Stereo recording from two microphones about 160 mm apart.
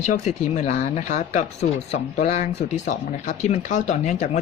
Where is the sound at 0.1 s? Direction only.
45° left (ahead or behind).